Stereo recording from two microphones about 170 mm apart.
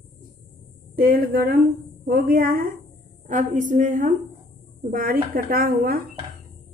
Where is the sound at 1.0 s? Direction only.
60° right (ahead or behind).